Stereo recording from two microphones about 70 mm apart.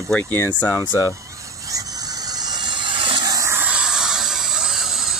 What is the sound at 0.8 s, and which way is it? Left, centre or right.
Speech, left.